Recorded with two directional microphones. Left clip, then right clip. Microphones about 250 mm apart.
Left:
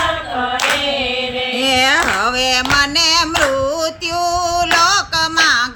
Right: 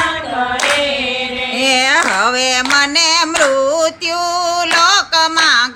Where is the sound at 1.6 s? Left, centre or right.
Centre.